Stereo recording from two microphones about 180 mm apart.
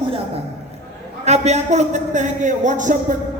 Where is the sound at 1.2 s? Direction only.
40° right (ahead or behind).